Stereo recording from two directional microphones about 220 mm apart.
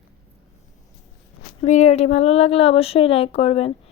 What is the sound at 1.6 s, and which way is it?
Speech, 30° left (ahead or behind).